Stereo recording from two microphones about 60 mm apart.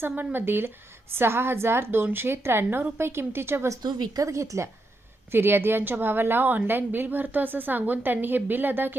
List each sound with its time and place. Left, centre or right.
0.3 s a woman's voice: right
3.7 s speech: right
5.3 s a woman's voice: right